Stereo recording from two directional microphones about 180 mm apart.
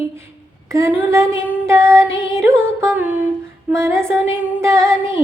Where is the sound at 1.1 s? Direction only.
15° right (ahead or behind).